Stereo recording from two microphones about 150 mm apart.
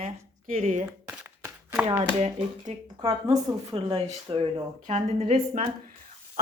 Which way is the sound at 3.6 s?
40° right (ahead or behind).